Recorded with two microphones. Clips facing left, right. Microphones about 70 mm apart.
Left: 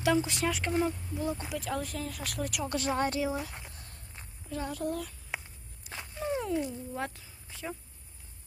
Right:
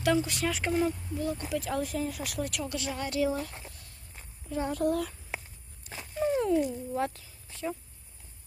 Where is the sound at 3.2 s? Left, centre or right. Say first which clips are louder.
Right 3 dB; centre.